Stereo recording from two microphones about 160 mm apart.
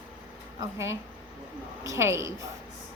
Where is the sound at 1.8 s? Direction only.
20° right (ahead or behind).